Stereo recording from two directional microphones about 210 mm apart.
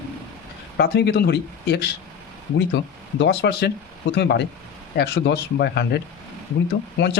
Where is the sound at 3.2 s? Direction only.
55° left (ahead or behind).